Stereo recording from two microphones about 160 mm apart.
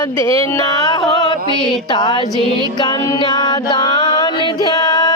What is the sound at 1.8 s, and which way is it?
Music, 30° left (ahead or behind).